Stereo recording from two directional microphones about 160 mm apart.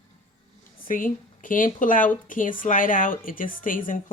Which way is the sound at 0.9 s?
60° left (ahead or behind).